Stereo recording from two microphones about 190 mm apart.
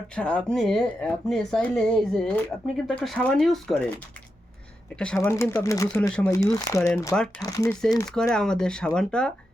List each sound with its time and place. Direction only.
0.1 s speech: 5° left (ahead or behind)
4.9 s speech: 5° left (ahead or behind)
6.3 s speech: 15° left (ahead or behind)
7.7 s speech: 5° left (ahead or behind)